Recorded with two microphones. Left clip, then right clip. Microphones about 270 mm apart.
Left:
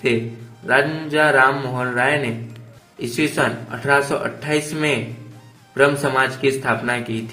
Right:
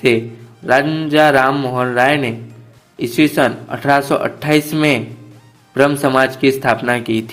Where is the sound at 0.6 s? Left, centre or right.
Right.